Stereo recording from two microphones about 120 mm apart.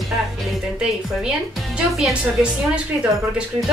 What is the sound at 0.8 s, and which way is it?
Speech, 5° right (ahead or behind).